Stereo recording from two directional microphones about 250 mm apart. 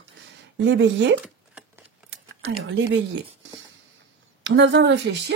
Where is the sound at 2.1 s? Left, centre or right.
Right.